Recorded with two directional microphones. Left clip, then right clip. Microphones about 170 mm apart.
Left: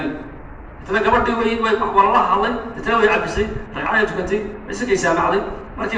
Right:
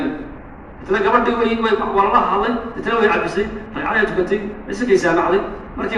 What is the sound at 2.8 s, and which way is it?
A man's voice, 35° right (ahead or behind).